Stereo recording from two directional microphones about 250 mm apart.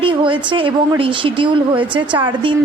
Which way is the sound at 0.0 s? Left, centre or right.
Centre.